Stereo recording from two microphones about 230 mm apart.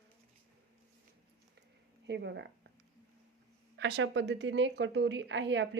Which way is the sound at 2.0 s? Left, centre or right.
Right.